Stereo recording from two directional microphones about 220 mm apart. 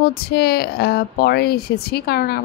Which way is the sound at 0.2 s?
45° left (ahead or behind).